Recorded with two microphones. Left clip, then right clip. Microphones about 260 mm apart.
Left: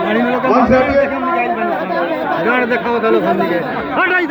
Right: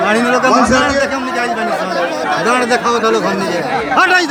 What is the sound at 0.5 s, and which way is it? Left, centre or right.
Speech, right.